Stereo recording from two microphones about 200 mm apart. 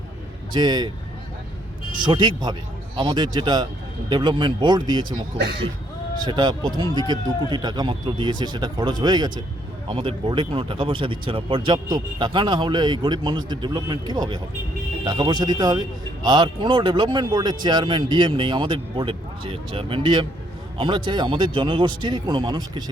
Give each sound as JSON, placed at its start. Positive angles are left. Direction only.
{"t": 0.5, "sound": "a man's voice", "side_deg": -20}
{"t": 2.0, "sound": "a man's voice", "side_deg": -20}
{"t": 5.4, "sound": "speech", "side_deg": -55}
{"t": 6.2, "sound": "a man's voice", "side_deg": -20}